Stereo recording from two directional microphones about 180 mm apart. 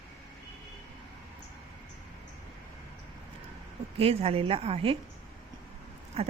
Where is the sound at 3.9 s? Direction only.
35° right (ahead or behind).